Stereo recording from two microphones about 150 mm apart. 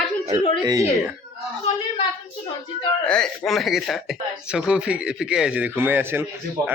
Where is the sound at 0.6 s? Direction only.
25° right (ahead or behind).